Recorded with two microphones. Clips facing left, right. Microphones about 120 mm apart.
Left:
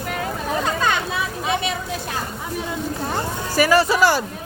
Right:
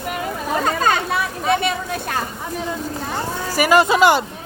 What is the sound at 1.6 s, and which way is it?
Vehicle, 55° right (ahead or behind).